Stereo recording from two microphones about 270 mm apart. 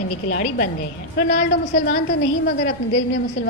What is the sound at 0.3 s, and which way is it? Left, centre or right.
Speech, left.